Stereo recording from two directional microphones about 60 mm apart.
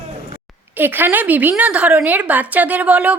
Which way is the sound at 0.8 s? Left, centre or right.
Right.